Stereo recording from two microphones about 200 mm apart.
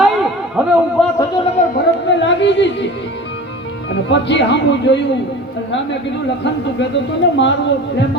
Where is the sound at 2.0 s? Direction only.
60° left (ahead or behind).